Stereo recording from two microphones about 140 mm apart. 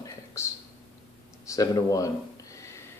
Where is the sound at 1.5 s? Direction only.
25° left (ahead or behind).